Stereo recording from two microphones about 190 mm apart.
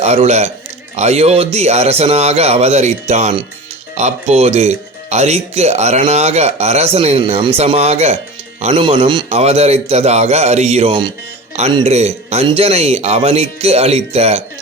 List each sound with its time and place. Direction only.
0.0 s speech: 35° right (ahead or behind)